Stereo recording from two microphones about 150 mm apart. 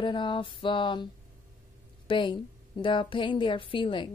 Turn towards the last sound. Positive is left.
turn(degrees=35)  # may be behind; listen again after turning